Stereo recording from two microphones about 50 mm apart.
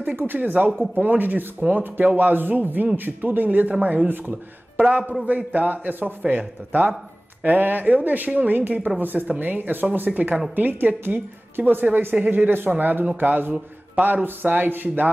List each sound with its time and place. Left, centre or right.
0.3 s a woman's voice: right